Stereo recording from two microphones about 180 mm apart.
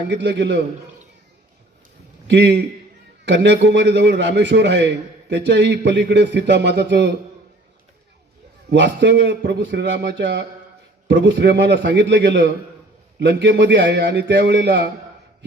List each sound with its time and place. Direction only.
0.1 s speech: 75° right (ahead or behind)
2.2 s a man's voice: 75° right (ahead or behind)
8.7 s speech: 75° right (ahead or behind)
13.1 s speech: 70° right (ahead or behind)